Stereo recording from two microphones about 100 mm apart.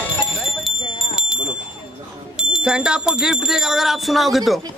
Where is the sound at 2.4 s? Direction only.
10° right (ahead or behind).